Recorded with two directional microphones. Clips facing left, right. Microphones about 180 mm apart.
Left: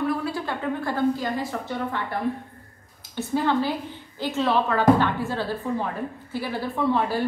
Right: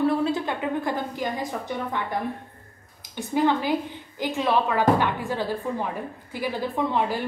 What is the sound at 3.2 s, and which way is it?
A woman's voice, 15° right (ahead or behind).